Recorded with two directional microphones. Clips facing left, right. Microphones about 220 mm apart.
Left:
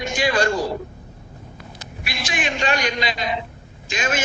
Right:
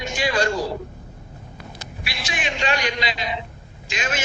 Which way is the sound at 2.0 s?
50° left (ahead or behind).